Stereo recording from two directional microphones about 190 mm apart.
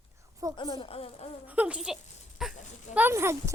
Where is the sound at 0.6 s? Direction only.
25° left (ahead or behind).